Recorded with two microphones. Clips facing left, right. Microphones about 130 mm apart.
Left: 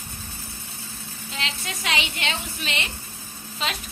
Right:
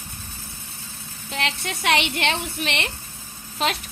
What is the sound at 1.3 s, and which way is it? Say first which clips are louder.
A woman's voice: right 5 dB; 60° right (ahead or behind).